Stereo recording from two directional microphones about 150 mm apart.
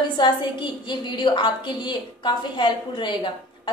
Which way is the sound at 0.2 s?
30° left (ahead or behind).